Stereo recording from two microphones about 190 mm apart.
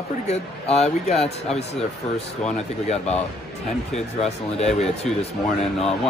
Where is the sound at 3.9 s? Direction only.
35° left (ahead or behind).